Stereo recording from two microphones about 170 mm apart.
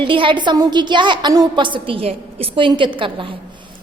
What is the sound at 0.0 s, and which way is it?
A woman's voice, 30° right (ahead or behind).